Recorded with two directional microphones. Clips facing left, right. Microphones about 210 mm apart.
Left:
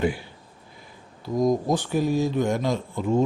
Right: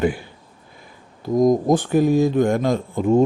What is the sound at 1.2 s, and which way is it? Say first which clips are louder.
A man's voice: right 6 dB; 50° right (ahead or behind).